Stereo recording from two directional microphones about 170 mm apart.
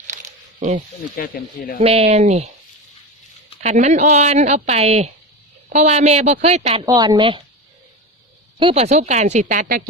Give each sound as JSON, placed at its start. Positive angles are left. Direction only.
{"t": 1.1, "sound": "speech", "side_deg": 60}
{"t": 1.8, "sound": "speech", "side_deg": -35}
{"t": 3.6, "sound": "speech", "side_deg": -40}
{"t": 6.8, "sound": "a woman's voice", "side_deg": -20}
{"t": 8.5, "sound": "speech", "side_deg": -35}